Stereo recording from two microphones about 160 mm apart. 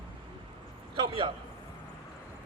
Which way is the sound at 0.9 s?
30° right (ahead or behind).